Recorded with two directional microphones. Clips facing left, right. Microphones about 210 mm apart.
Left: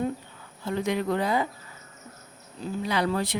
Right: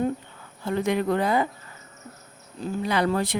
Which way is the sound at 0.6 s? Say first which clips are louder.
Right 3 dB; 55° right (ahead or behind).